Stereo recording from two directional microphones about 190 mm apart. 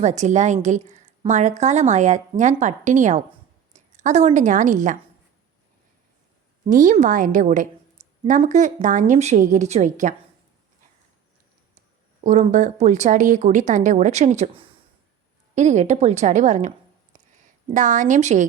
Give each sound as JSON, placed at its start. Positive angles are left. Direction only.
{"t": 0.0, "sound": "speech", "side_deg": -35}
{"t": 3.7, "sound": "a sound", "side_deg": -40}
{"t": 4.4, "sound": "speech", "side_deg": -40}
{"t": 6.7, "sound": "a woman's voice", "side_deg": -40}
{"t": 12.2, "sound": "a woman's voice", "side_deg": -40}